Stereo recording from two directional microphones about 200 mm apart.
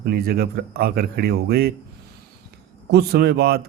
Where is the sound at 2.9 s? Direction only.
55° right (ahead or behind).